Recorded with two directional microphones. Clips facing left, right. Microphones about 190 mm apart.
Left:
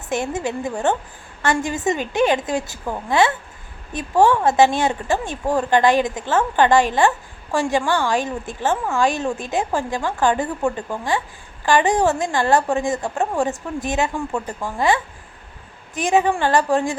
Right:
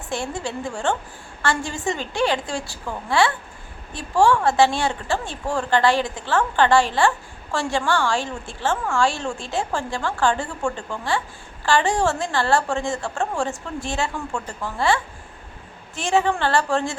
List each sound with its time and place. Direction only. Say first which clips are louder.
0.1 s a woman's voice: left 4 dB; 20° left (ahead or behind)